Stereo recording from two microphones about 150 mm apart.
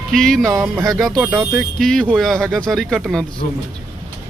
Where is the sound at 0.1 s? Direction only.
Centre (ahead or behind).